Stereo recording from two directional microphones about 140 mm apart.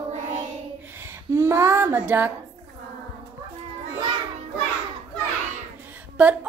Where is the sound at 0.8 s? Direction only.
15° right (ahead or behind).